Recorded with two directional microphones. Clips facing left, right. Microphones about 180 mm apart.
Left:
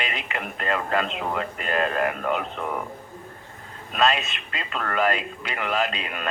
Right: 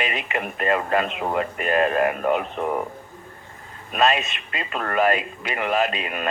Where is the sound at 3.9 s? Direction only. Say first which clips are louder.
Right 2 dB; 15° right (ahead or behind).